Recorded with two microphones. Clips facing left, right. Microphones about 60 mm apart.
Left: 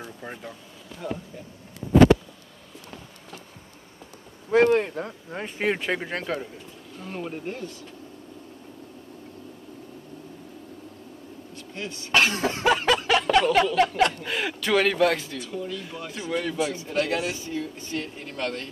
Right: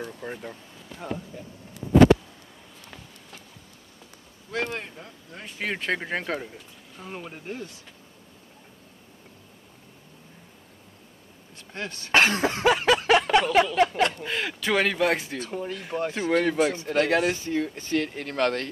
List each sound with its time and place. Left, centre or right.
0.0 s speech: centre
1.0 s speech: right
4.6 s speech: left
5.6 s speech: centre
5.9 s speech: centre
7.2 s speech: centre
11.5 s a sound: right
12.1 s cough: right
12.6 s a sound: centre
13.0 s a sound: right
13.7 s speech: centre
15.0 s speech: right
15.3 s speech: right